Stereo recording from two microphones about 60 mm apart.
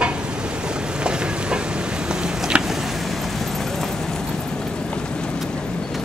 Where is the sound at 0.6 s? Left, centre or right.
Centre.